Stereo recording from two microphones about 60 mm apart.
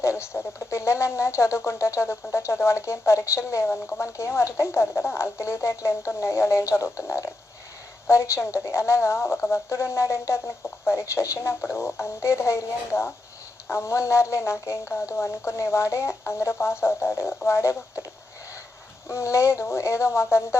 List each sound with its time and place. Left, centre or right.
0.0 s speech: left
19.0 s speech: left